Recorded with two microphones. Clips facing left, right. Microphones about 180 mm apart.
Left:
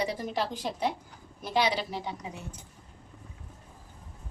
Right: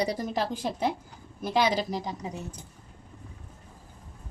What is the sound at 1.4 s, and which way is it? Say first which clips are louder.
A woman's voice: right 3 dB; 45° right (ahead or behind).